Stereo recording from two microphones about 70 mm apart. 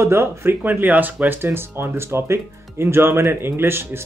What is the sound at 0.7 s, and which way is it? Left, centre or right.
Speech, right.